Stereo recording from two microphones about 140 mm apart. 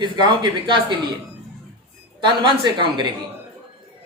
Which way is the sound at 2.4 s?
35° right (ahead or behind).